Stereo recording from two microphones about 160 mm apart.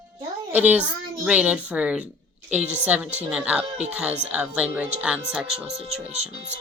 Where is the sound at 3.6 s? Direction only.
35° right (ahead or behind).